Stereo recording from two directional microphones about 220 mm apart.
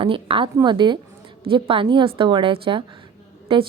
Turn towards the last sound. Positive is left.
turn(degrees=-25)  # may be behind; listen again after turning